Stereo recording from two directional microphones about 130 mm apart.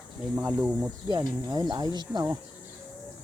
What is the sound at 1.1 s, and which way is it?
Speech, 35° right (ahead or behind).